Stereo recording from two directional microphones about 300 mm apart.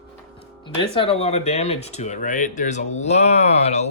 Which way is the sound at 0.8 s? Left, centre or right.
Centre.